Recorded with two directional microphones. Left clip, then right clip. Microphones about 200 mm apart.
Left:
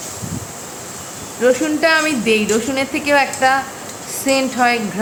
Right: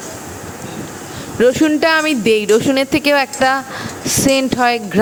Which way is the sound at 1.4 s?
45° right (ahead or behind).